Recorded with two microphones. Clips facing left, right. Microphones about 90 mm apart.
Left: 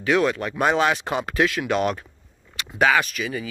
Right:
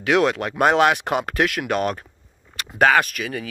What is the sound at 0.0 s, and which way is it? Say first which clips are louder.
Speech: right 2 dB; 70° right (ahead or behind).